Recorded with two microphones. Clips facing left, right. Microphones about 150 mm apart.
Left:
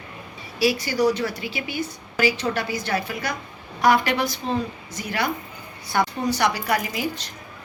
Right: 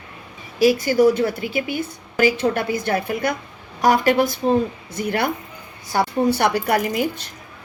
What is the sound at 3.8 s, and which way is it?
A woman's voice, 40° right (ahead or behind).